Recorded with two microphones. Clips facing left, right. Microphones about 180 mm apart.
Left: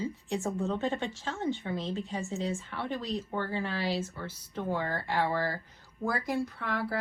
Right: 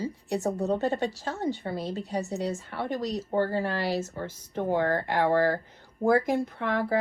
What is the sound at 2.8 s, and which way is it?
Speech, 40° right (ahead or behind).